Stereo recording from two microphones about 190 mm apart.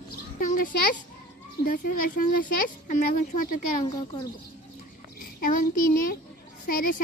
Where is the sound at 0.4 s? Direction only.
45° left (ahead or behind).